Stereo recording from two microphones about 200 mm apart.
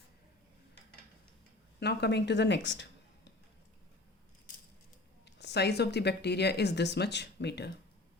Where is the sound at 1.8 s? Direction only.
55° left (ahead or behind).